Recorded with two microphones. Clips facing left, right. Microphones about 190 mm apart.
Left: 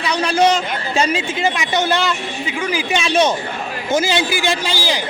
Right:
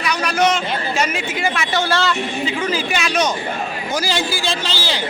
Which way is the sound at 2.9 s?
25° left (ahead or behind).